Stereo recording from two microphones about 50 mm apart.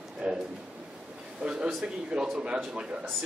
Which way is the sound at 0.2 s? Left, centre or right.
Right.